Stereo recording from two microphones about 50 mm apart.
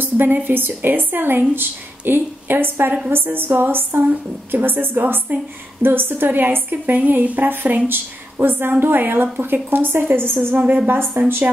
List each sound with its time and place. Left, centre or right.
0.0 s a woman's voice: right
10.5 s a woman's voice: right
10.9 s a woman's voice: right